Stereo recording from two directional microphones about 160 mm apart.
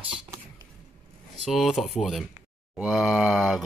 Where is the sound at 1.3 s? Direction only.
Centre (ahead or behind).